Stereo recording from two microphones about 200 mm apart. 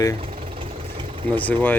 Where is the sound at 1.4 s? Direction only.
10° left (ahead or behind).